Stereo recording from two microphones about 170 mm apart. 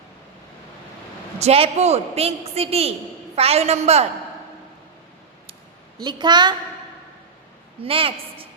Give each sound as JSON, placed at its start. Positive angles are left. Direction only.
{"t": 1.4, "sound": "a man's voice", "side_deg": -35}
{"t": 6.0, "sound": "a woman's voice", "side_deg": -25}
{"t": 7.8, "sound": "a woman's voice", "side_deg": -35}